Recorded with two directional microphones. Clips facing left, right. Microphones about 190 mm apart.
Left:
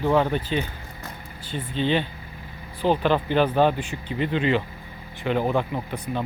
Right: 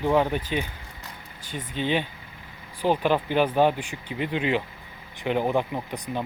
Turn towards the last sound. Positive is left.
turn(degrees=-15)  # may be behind; listen again after turning